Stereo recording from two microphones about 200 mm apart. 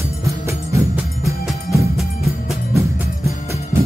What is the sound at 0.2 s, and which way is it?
Music, 15° right (ahead or behind).